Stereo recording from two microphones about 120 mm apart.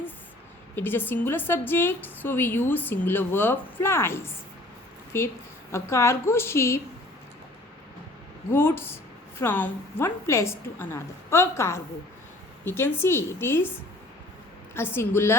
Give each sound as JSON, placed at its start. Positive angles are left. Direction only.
{"t": 0.8, "sound": "a woman's voice", "side_deg": 15}
{"t": 8.4, "sound": "a woman's voice", "side_deg": 20}
{"t": 14.8, "sound": "a woman's voice", "side_deg": 20}